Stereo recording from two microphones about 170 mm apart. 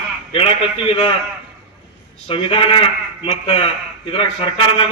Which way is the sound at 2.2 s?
35° left (ahead or behind).